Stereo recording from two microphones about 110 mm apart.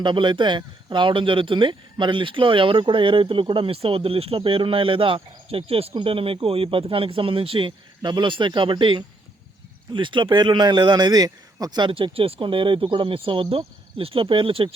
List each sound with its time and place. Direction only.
0.0 s speech: 45° right (ahead or behind)